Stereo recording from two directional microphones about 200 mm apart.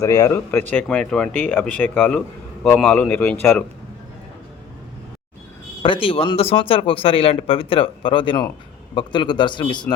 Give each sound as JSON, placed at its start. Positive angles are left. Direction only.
{"t": 0.0, "sound": "speech", "side_deg": 15}
{"t": 5.8, "sound": "a man's voice", "side_deg": 25}